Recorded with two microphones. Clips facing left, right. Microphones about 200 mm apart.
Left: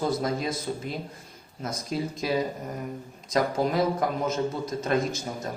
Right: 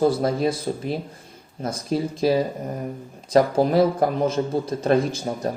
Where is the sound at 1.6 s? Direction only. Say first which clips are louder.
Right 6 dB; 30° right (ahead or behind).